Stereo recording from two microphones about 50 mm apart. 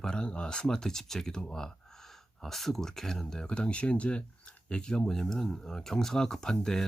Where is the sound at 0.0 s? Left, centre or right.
Centre.